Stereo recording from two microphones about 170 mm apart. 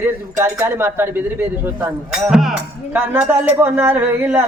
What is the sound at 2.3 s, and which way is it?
Speech, 5° right (ahead or behind).